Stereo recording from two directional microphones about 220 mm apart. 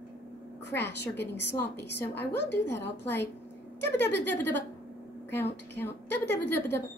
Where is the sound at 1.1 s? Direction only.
50° left (ahead or behind).